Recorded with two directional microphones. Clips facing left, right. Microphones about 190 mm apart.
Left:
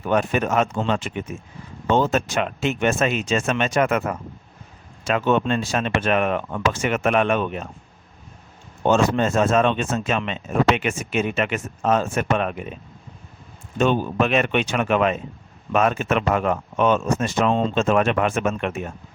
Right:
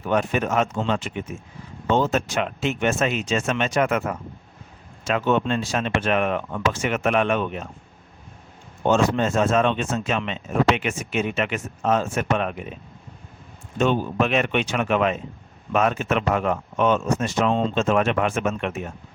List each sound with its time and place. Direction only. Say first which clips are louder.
0.1 s speech: left 1 dB; 50° left (ahead or behind)
8.9 s speech: left 1 dB; 50° left (ahead or behind)
13.8 s speech: left 1 dB; 55° left (ahead or behind)